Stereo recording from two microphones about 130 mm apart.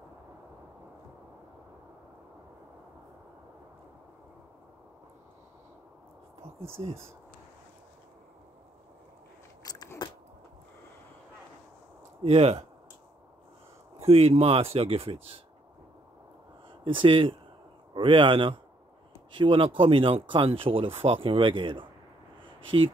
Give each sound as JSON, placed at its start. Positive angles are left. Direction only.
{"t": 6.8, "sound": "speech", "side_deg": -50}
{"t": 9.6, "sound": "biting", "side_deg": 30}
{"t": 12.2, "sound": "speech", "side_deg": -50}
{"t": 13.9, "sound": "speech", "side_deg": -50}
{"t": 16.8, "sound": "speech", "side_deg": -40}